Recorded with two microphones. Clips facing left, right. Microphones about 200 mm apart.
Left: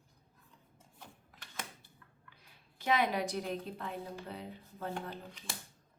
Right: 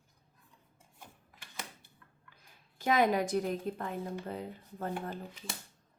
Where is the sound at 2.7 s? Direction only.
45° right (ahead or behind).